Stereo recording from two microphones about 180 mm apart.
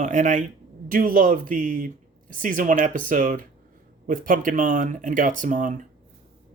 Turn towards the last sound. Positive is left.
turn(degrees=-45)  # may be behind; listen again after turning